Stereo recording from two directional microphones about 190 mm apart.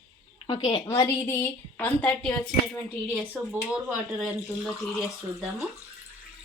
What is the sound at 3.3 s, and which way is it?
Speech, 5° right (ahead or behind).